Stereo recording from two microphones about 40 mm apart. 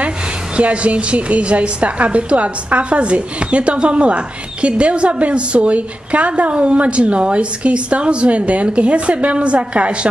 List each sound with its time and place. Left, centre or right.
0.6 s a woman's voice: right